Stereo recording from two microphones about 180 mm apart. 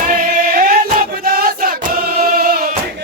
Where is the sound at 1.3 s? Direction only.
55° right (ahead or behind).